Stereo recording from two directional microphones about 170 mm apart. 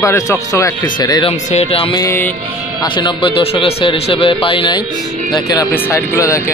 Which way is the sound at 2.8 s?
25° left (ahead or behind).